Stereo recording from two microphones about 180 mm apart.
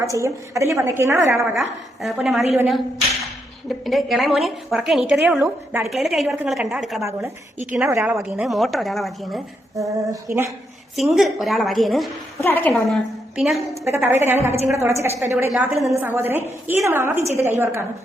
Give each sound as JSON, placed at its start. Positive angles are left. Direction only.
{"t": 0.0, "sound": "a woman's voice", "side_deg": -15}
{"t": 2.0, "sound": "a woman's voice", "side_deg": 0}
{"t": 3.7, "sound": "a woman's voice", "side_deg": 0}
{"t": 5.4, "sound": "a woman's voice", "side_deg": -15}
{"t": 5.9, "sound": "a woman's voice", "side_deg": 0}
{"t": 7.7, "sound": "a woman's voice", "side_deg": -10}
{"t": 9.7, "sound": "a woman's voice", "side_deg": -15}
{"t": 10.9, "sound": "a woman's voice", "side_deg": 0}
{"t": 12.4, "sound": "a woman's voice", "side_deg": 10}
{"t": 13.3, "sound": "a woman's voice", "side_deg": 0}
{"t": 13.8, "sound": "a woman's voice", "side_deg": -15}